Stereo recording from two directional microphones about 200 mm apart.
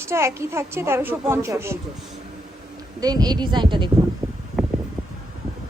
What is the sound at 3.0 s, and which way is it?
Speech, 20° right (ahead or behind).